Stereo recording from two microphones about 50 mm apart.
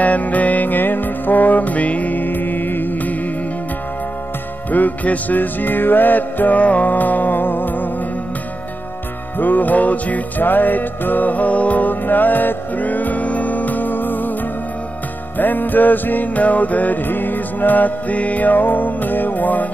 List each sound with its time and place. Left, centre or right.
0.0 s music: left
4.6 s music: left
9.4 s music: left
15.3 s music: left